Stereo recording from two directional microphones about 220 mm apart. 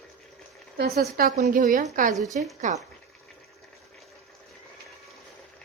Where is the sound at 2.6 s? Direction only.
35° right (ahead or behind).